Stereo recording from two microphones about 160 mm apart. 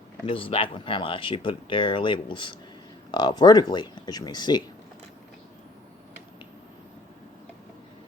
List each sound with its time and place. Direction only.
0.3 s speech: 35° left (ahead or behind)